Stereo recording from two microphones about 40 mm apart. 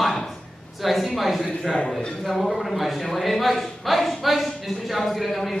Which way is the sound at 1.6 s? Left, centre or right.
Left.